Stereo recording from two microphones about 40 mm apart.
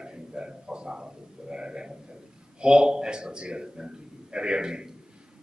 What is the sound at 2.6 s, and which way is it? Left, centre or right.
A man's voice, right.